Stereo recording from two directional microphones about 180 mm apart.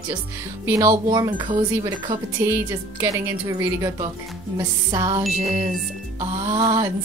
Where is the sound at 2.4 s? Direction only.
15° right (ahead or behind).